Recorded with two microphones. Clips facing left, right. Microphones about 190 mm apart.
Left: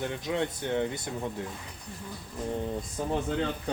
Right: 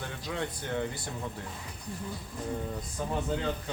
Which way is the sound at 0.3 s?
20° left (ahead or behind).